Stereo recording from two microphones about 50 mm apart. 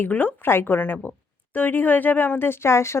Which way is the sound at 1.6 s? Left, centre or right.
Left.